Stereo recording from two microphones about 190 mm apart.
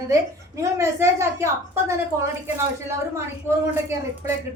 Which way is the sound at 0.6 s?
15° right (ahead or behind).